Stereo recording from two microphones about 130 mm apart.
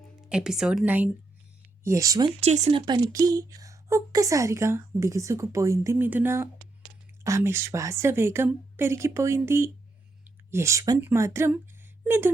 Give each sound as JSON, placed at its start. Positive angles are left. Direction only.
{"t": 0.3, "sound": "speech", "side_deg": -5}
{"t": 1.8, "sound": "a woman's voice", "side_deg": -25}
{"t": 2.4, "sound": "speech", "side_deg": -55}
{"t": 2.7, "sound": "a woman's voice", "side_deg": -35}